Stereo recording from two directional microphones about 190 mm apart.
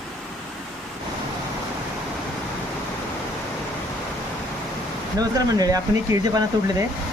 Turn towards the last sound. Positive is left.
turn(degrees=-15)  # may be behind; listen again after turning